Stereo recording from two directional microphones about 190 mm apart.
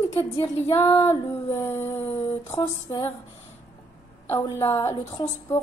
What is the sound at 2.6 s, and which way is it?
Speech, 25° left (ahead or behind).